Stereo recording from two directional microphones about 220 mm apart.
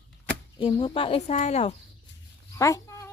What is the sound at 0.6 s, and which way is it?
Speech, 25° left (ahead or behind).